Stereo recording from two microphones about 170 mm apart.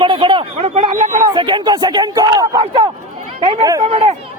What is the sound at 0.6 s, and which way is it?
Speech, 45° right (ahead or behind).